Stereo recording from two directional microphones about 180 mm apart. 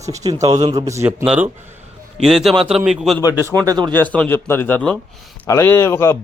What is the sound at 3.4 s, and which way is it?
Speech, 20° right (ahead or behind).